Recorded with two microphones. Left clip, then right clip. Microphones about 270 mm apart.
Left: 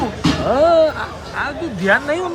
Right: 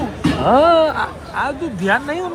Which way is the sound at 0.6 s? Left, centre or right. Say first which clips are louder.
Even; centre.